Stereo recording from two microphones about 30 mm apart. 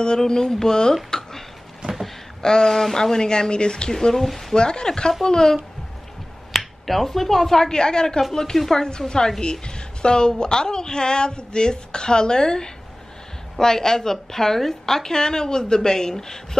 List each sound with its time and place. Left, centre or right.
0.2 s a woman's voice: centre
2.4 s a woman's voice: left
3.9 s a woman's voice: centre
4.6 s a woman's voice: left
6.5 s a woman's voice: centre
8.8 s a woman's voice: left